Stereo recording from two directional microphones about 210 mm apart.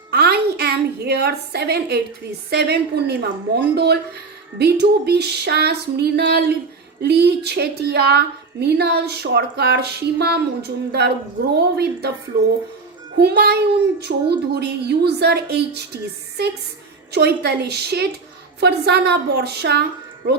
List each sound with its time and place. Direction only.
0.1 s a woman's voice: 50° right (ahead or behind)
13.1 s a woman's voice: 50° right (ahead or behind)
17.1 s a woman's voice: 50° right (ahead or behind)